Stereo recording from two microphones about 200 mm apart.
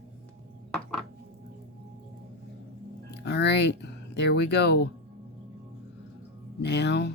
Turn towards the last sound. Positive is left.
turn(degrees=60)  # may be behind; listen again after turning